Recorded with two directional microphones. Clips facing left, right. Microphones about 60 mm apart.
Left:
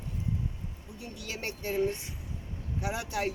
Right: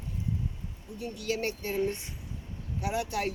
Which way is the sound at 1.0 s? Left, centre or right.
Centre.